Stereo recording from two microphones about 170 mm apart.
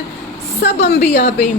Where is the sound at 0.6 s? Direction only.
75° left (ahead or behind).